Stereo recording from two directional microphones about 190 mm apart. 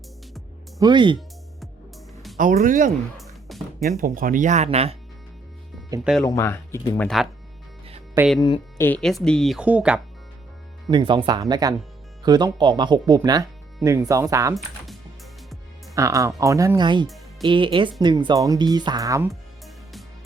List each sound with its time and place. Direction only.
0.8 s speech: 25° right (ahead or behind)
2.4 s speech: 45° right (ahead or behind)
5.9 s speech: 20° right (ahead or behind)
6.2 s speech: 15° left (ahead or behind)
8.4 s speech: 25° left (ahead or behind)
8.8 s speech: 5° left (ahead or behind)
10.8 s speech: 25° right (ahead or behind)
16.0 s speech: 15° right (ahead or behind)
19.3 s music: centre (ahead or behind)